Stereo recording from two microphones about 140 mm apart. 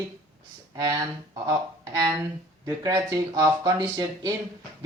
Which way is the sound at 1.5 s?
30° right (ahead or behind).